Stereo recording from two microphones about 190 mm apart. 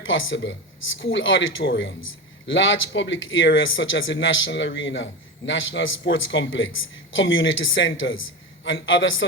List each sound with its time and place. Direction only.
0.0 s a man's voice: 90° left